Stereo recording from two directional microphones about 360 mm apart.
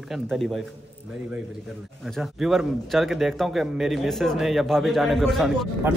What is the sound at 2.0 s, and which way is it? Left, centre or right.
A man's voice, centre.